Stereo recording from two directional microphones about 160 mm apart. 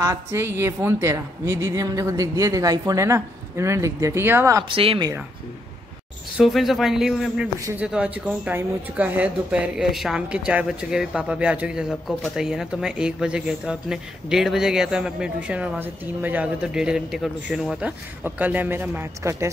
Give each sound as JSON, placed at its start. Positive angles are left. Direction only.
{"t": 0.0, "sound": "a woman's voice", "side_deg": -20}
{"t": 4.7, "sound": "speech", "side_deg": -30}
{"t": 6.3, "sound": "a woman's voice", "side_deg": 0}